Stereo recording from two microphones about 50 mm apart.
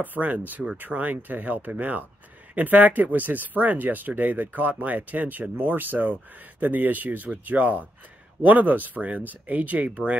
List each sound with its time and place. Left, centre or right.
0.0 s speech: right